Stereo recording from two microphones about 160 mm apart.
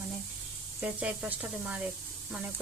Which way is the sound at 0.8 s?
10° right (ahead or behind).